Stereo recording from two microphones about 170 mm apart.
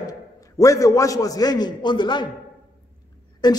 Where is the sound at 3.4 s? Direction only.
25° left (ahead or behind).